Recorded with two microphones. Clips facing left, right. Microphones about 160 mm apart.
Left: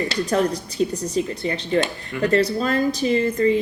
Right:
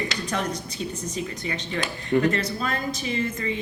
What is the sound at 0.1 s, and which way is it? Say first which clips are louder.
A woman's voice: left 7 dB; 35° left (ahead or behind).